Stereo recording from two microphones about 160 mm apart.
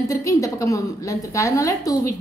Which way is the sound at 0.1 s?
20° left (ahead or behind).